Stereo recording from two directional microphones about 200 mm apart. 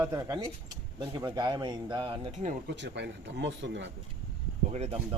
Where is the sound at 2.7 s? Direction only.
60° right (ahead or behind).